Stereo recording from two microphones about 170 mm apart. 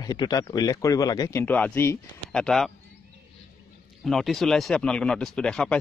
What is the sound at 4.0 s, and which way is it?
Speech, centre (ahead or behind).